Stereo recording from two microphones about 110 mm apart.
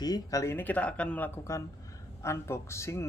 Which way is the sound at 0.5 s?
15° left (ahead or behind).